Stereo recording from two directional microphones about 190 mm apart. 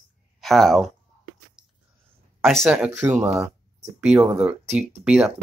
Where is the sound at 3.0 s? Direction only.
15° right (ahead or behind).